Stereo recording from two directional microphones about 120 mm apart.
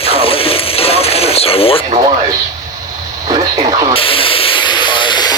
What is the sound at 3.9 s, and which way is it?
Steam, 50° left (ahead or behind).